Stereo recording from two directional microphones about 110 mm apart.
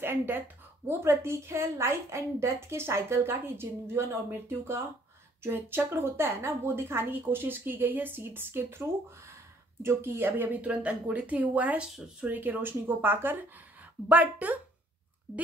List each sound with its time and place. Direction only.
0.0 s a woman's voice: 20° right (ahead or behind)